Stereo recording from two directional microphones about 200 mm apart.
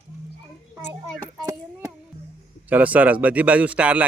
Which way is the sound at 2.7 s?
5° right (ahead or behind).